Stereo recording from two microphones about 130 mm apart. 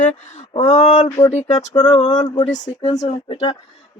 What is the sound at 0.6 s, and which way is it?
Speech, 60° left (ahead or behind).